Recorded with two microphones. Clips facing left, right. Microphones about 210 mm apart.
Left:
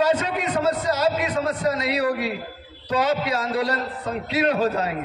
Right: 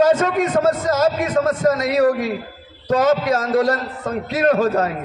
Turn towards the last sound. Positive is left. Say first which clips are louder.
# right 5 dB
turn(degrees=-45)  # may be behind; listen again after turning